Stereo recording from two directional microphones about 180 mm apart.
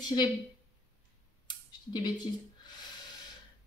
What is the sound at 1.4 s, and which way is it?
Clicking, 25° left (ahead or behind).